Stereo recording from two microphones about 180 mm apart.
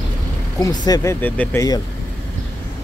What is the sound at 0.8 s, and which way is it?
Speech, 20° left (ahead or behind).